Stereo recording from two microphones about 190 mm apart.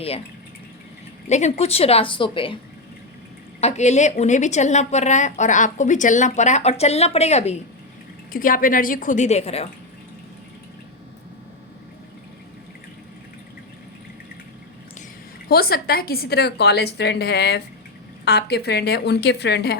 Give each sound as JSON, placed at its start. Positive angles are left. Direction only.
{"t": 1.3, "sound": "a woman's voice", "side_deg": 35}
{"t": 3.6, "sound": "a woman's voice", "side_deg": 35}
{"t": 8.3, "sound": "a woman's voice", "side_deg": 45}
{"t": 15.4, "sound": "a woman's voice", "side_deg": 55}